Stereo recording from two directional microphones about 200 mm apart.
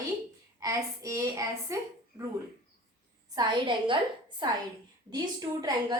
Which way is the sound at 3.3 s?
25° right (ahead or behind).